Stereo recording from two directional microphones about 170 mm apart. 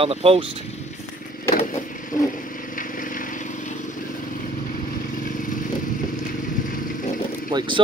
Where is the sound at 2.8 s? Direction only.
55° left (ahead or behind).